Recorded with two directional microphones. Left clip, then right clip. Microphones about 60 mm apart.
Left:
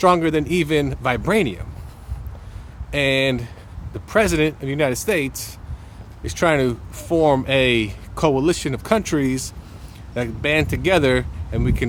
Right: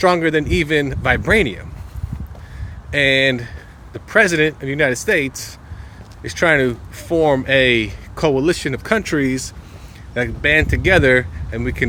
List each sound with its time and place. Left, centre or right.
0.0 s speech: left
1.0 s speech: left
2.9 s speech: left
6.2 s speech: left
8.4 s speech: left